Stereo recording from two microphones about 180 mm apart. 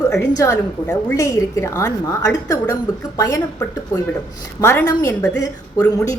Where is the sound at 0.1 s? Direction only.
15° left (ahead or behind).